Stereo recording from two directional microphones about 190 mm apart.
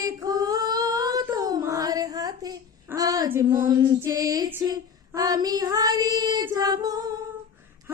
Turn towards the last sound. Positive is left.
turn(degrees=-20)  # may be behind; listen again after turning